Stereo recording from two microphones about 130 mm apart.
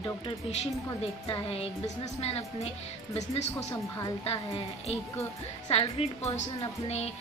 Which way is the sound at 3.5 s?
20° left (ahead or behind).